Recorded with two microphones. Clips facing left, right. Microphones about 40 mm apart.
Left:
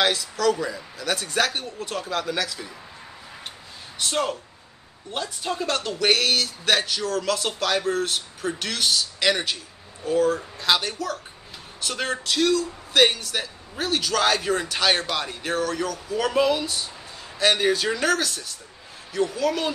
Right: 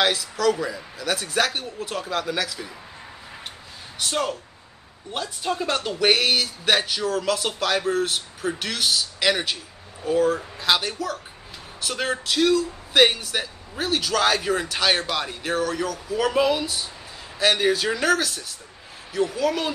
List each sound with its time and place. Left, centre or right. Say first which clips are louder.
0.0 s speech: right 1 dB; centre
4.0 s speech: even; centre